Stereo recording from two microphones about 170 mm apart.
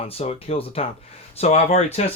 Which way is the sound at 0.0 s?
35° left (ahead or behind).